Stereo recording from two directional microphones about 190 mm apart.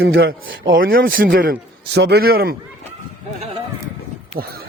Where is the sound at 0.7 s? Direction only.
50° right (ahead or behind).